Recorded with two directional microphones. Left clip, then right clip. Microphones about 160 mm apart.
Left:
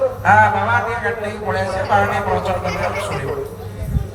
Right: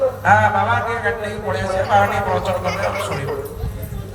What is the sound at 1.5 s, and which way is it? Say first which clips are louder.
A man's voice: right 1 dB; 30° right (ahead or behind).